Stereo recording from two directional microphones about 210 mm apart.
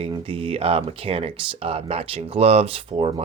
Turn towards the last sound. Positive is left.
turn(degrees=-25)  # may be behind; listen again after turning